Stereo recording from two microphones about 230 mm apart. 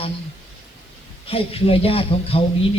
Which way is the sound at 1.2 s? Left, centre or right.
Left.